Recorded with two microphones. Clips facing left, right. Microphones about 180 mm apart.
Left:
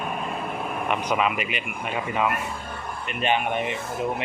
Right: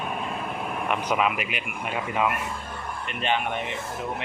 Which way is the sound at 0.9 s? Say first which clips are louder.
Even; centre (ahead or behind).